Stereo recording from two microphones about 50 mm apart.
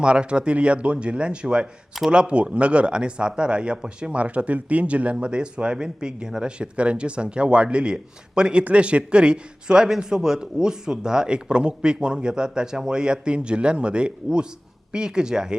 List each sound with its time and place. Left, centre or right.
0.0 s a man's voice: centre